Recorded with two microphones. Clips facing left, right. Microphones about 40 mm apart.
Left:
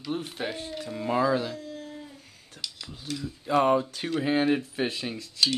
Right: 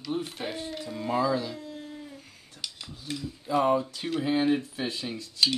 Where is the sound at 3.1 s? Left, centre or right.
Right.